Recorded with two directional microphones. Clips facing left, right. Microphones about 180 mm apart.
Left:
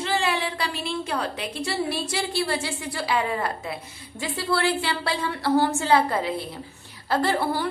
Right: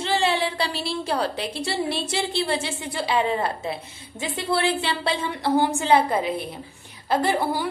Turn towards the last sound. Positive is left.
turn(degrees=-15)  # may be behind; listen again after turning